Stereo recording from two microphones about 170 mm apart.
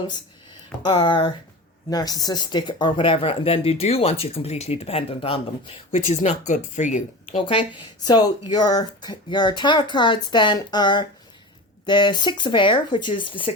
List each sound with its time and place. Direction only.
0.9 s speech: 25° left (ahead or behind); by 7.4 s 45° left (ahead or behind)
8.0 s speech: 25° left (ahead or behind)